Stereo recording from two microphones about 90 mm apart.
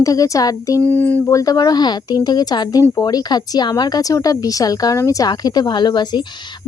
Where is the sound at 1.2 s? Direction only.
40° left (ahead or behind).